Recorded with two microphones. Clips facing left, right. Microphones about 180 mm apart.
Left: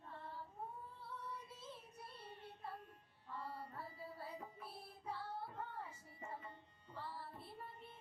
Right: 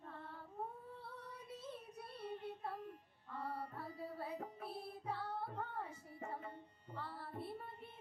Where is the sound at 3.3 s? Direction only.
60° right (ahead or behind).